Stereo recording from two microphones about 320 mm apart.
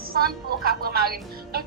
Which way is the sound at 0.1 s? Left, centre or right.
Right.